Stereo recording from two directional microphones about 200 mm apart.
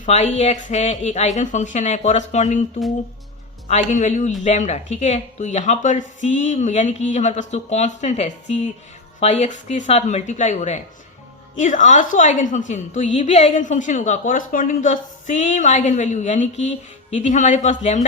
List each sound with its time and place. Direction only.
0.0 s a woman's voice: 35° left (ahead or behind)
3.7 s a woman's voice: 35° left (ahead or behind)